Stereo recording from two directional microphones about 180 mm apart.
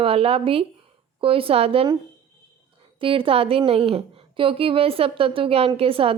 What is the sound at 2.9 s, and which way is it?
A woman's voice, 30° right (ahead or behind).